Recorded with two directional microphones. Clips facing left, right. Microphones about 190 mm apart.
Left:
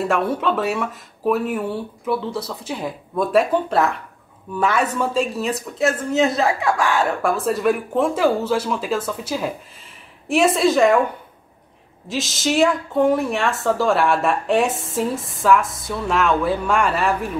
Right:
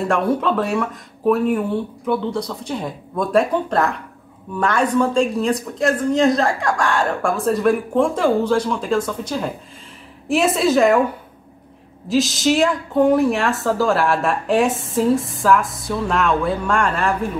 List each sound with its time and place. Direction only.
0.1 s a woman's voice: centre (ahead or behind)
12.1 s a woman's voice: centre (ahead or behind)